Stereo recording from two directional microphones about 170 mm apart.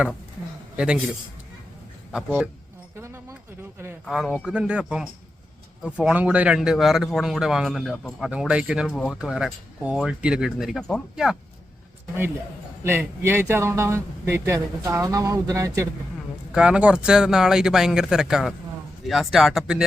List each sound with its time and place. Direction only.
2.1 s speech: 5° right (ahead or behind)
2.9 s a sound: 15° right (ahead or behind)
4.0 s speech: centre (ahead or behind)
12.8 s speech: 15° right (ahead or behind)
16.6 s speech: 5° right (ahead or behind)